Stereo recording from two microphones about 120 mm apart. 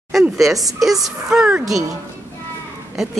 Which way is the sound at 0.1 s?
Centre (ahead or behind).